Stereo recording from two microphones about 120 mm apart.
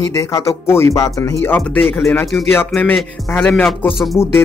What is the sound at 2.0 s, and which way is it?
Speech, 25° left (ahead or behind).